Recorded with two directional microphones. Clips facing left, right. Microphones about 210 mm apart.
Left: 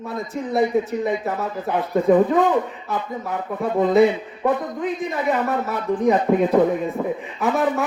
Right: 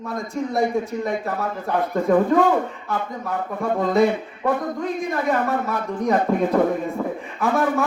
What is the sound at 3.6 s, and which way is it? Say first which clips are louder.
Speech: left 3 dB; 20° left (ahead or behind).